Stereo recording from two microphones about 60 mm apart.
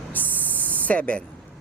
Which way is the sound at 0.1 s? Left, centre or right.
Left.